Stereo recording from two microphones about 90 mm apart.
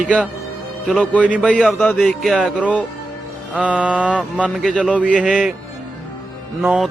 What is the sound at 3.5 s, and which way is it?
Mantra, 15° right (ahead or behind).